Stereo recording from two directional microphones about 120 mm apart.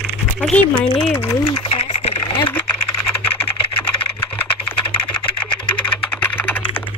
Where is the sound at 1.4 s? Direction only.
50° left (ahead or behind).